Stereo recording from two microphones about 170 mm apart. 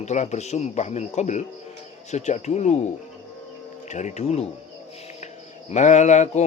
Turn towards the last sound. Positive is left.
turn(degrees=45)  # may be behind; listen again after turning